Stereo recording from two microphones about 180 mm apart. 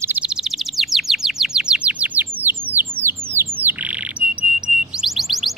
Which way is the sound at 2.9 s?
15° right (ahead or behind).